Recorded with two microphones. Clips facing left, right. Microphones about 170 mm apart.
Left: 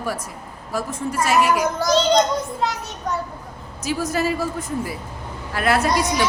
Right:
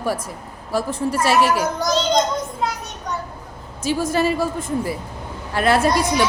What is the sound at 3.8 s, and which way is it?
A woman's voice, 25° right (ahead or behind).